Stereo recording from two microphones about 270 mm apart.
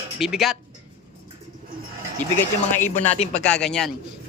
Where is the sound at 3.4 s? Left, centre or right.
Centre.